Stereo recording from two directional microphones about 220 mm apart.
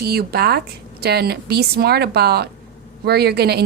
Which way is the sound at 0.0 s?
45° right (ahead or behind).